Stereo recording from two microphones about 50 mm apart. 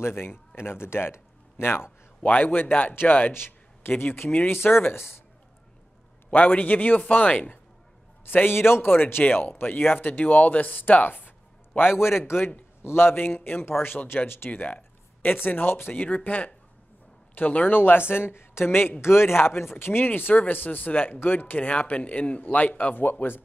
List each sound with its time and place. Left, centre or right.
0.0 s speech: left
0.6 s speech: left
2.2 s speech: left
3.3 s speech: left
6.3 s speech: left
8.3 s speech: left
12.0 s speech: left
13.2 s speech: left
14.5 s speech: left
15.2 s speech: left
15.9 s speech: left
17.4 s speech: left
17.7 s speech: left
22.9 s speech: left